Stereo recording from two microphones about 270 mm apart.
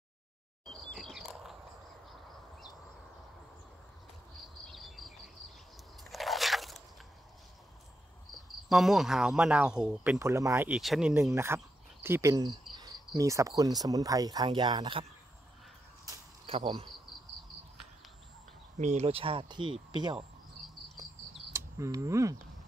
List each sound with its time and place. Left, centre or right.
0.7 s a sound: centre
4.6 s cricket: centre
6.0 s biting: centre
8.6 s speech: centre
16.1 s cricket: right
18.8 s speech: right
21.5 s speech: centre